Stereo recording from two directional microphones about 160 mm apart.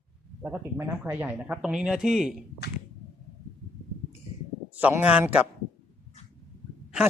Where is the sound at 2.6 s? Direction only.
90° left.